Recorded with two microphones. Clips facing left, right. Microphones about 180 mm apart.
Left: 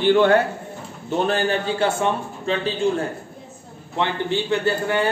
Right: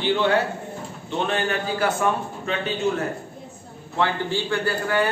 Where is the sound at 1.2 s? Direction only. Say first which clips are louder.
Left 3 dB; 35° left (ahead or behind).